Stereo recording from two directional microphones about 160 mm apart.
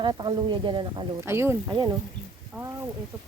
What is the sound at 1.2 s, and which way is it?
Speech, 15° right (ahead or behind).